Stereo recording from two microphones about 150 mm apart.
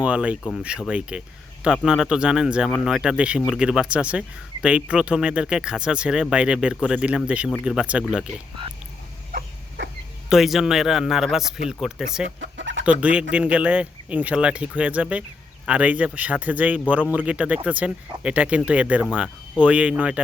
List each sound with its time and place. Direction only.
0.0 s a man's voice: 10° right (ahead or behind)
9.3 s a sound: 90° right
10.2 s a man's voice: centre (ahead or behind)